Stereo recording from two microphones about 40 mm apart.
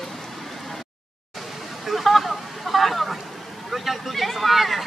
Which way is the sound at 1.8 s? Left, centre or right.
Centre.